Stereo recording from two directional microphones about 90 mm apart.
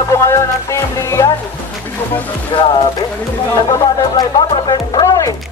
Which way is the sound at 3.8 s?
45° left (ahead or behind).